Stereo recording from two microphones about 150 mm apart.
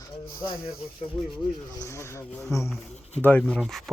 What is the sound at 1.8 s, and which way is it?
Speech, 20° left (ahead or behind).